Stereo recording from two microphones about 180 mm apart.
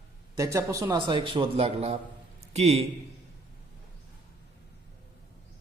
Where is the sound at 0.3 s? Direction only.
20° right (ahead or behind); by 2.8 s 35° right (ahead or behind).